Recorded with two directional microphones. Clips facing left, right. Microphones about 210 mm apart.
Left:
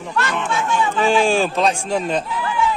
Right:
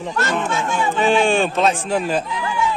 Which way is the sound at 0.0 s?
40° right (ahead or behind).